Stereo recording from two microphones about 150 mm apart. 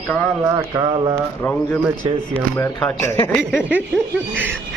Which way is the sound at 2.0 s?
30° right (ahead or behind).